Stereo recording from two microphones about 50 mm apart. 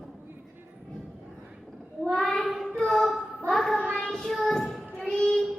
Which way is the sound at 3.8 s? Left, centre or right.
Left.